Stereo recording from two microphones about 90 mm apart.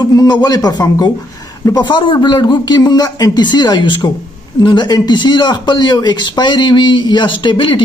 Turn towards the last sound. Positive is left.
turn(degrees=65)  # may be behind; listen again after turning